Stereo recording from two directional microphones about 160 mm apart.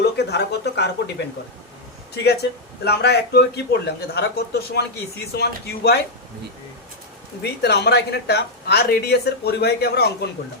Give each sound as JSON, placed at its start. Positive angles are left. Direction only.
{"t": 0.0, "sound": "speech", "side_deg": 90}
{"t": 2.1, "sound": "a man's voice", "side_deg": 90}
{"t": 7.6, "sound": "a man's voice", "side_deg": 90}